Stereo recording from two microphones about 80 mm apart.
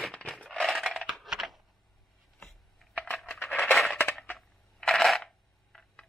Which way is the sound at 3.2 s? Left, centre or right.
Left.